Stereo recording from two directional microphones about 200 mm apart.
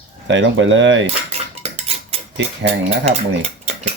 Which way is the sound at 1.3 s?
30° right (ahead or behind).